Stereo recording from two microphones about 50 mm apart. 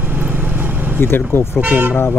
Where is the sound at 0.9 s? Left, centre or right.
Left.